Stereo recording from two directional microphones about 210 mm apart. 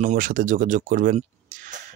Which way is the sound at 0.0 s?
40° right (ahead or behind).